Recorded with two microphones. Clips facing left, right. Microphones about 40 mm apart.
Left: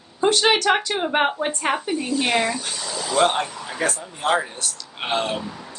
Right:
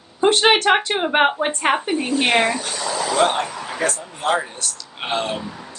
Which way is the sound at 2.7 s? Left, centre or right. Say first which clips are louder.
Right 3 dB; right.